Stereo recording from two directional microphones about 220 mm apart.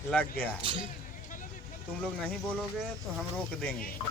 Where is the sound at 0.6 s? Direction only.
25° right (ahead or behind).